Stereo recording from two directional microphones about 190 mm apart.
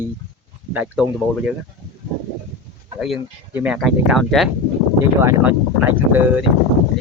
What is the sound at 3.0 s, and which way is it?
Speech, 5° right (ahead or behind).